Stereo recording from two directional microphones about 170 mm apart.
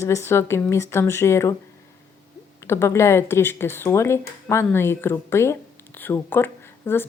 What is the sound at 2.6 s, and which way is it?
Speech, 15° left (ahead or behind).